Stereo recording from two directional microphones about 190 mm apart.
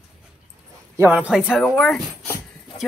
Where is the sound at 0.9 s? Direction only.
10° right (ahead or behind).